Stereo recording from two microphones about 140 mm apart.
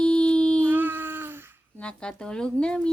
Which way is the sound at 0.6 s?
15° right (ahead or behind).